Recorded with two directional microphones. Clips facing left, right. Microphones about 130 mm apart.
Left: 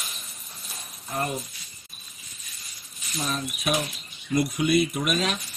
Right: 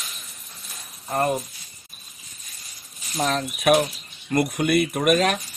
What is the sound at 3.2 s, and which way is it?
Speech, 75° right (ahead or behind).